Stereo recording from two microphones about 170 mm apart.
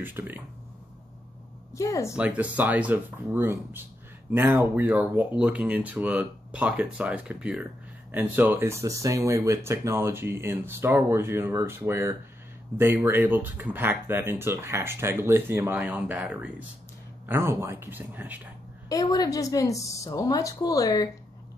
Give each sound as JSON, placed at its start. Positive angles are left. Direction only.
{"t": 0.0, "sound": "speech", "side_deg": -10}
{"t": 1.7, "sound": "a woman's voice", "side_deg": 20}
{"t": 2.1, "sound": "speech", "side_deg": -10}
{"t": 18.9, "sound": "a woman's voice", "side_deg": 20}